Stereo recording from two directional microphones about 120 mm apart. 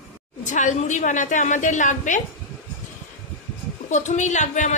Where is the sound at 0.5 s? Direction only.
85° left.